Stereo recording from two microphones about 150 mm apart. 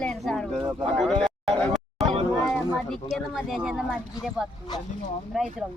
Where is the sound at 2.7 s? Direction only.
Centre (ahead or behind).